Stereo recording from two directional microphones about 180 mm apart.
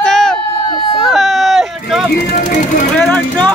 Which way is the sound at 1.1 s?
Centre (ahead or behind).